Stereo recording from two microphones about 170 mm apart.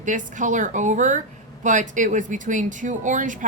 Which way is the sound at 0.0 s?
45° right (ahead or behind).